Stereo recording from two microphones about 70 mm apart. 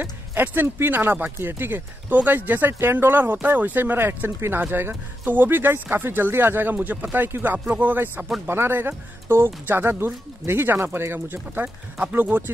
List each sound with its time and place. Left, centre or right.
0.0 s speech: right